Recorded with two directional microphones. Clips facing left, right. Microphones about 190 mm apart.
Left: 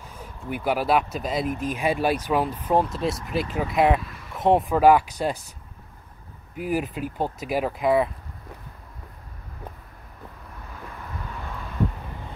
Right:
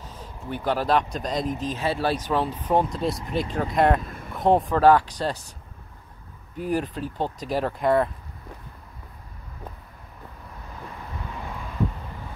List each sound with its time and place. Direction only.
0.5 s speech: 10° left (ahead or behind)
4.0 s vehicle: 50° right (ahead or behind)
4.3 s speech: centre (ahead or behind)
6.5 s speech: 10° left (ahead or behind)